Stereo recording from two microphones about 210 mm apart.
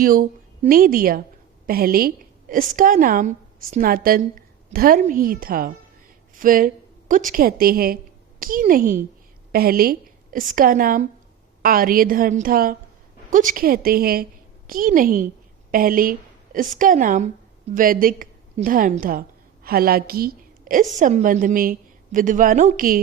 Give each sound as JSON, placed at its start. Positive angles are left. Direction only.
{"t": 0.0, "sound": "a woman's voice", "side_deg": -40}